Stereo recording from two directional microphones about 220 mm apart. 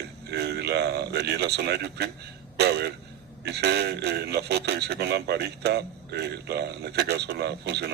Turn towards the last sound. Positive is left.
turn(degrees=-50)  # may be behind; listen again after turning